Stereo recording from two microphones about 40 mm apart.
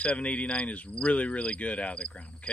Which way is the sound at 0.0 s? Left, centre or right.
Left.